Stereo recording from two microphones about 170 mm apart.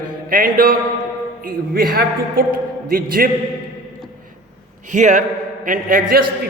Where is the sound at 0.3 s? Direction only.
55° right (ahead or behind).